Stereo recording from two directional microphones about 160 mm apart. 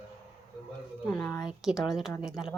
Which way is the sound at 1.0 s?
10° left (ahead or behind).